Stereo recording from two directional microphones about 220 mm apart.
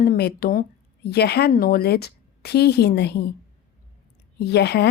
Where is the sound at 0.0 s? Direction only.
45° left (ahead or behind).